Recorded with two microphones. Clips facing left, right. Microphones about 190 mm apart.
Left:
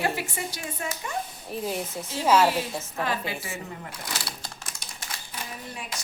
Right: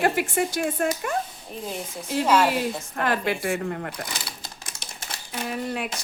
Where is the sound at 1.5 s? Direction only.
5° left (ahead or behind).